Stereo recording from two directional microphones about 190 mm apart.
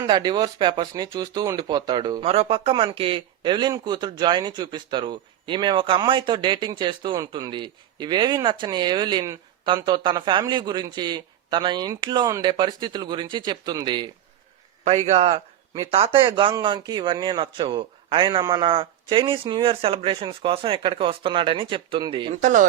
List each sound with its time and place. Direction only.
0.0 s speech: 20° right (ahead or behind)
14.8 s speech: 35° right (ahead or behind)
22.3 s speech: 40° right (ahead or behind)